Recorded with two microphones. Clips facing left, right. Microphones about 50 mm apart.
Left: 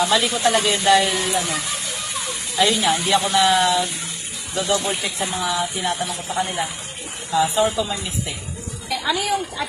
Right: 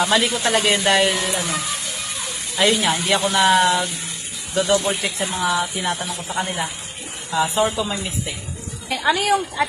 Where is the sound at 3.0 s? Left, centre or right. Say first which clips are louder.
Even; centre.